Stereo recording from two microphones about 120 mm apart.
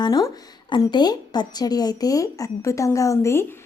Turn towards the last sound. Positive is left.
turn(degrees=25)  # may be behind; listen again after turning